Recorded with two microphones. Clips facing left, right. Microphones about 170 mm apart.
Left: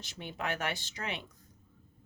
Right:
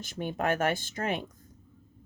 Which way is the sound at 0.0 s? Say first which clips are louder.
Right 8 dB; 50° right (ahead or behind).